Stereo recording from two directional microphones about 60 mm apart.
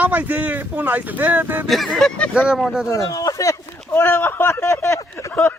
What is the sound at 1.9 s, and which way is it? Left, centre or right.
Speech, centre.